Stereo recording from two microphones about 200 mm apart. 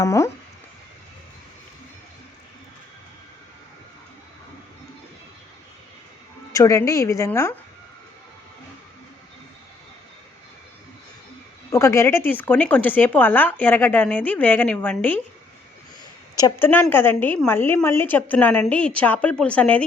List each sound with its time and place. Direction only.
0.0 s a woman's voice: 15° left (ahead or behind)
6.5 s a woman's voice: 15° left (ahead or behind)
11.7 s a woman's voice: 15° left (ahead or behind)
16.3 s a woman's voice: 15° left (ahead or behind)